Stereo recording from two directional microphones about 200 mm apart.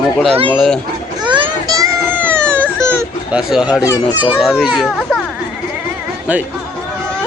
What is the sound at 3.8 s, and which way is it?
Speech, 15° left (ahead or behind).